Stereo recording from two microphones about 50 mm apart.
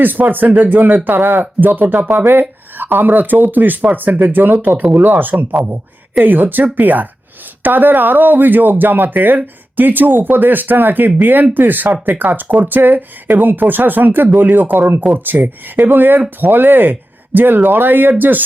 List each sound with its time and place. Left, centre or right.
0.0 s speech: right